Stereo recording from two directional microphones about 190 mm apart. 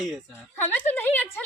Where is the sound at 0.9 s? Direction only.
10° left (ahead or behind).